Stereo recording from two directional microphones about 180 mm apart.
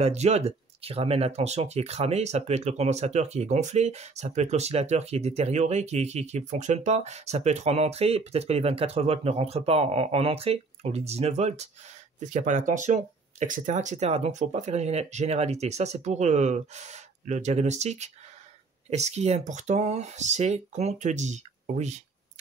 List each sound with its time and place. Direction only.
0.0 s speech: 35° right (ahead or behind)